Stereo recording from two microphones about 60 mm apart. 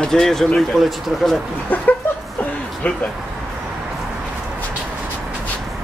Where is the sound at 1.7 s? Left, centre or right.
Left.